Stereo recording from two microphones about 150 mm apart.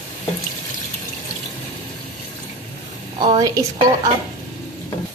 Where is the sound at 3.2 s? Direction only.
30° right (ahead or behind).